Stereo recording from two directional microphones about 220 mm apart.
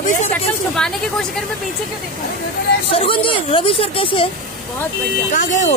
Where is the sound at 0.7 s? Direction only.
Centre (ahead or behind).